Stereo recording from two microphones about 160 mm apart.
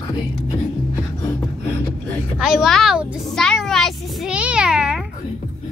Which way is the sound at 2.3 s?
5° right (ahead or behind).